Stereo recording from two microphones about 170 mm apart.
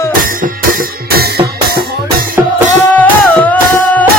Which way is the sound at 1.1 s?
65° right (ahead or behind).